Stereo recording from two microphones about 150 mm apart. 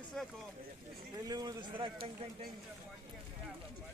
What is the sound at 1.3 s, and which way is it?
Speech, 25° right (ahead or behind).